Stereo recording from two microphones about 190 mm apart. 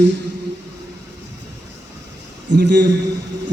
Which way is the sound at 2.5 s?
65° right (ahead or behind).